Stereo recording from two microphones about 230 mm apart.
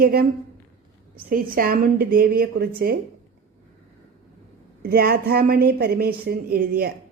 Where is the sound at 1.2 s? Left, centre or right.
Right.